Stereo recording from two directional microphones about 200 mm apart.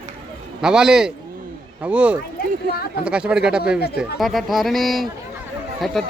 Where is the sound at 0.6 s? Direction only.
5° right (ahead or behind).